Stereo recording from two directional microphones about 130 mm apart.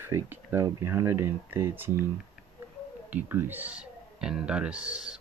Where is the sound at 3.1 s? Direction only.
15° right (ahead or behind).